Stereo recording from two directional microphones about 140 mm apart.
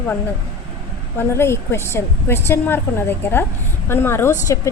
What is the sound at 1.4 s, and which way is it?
A woman's voice, 20° left (ahead or behind).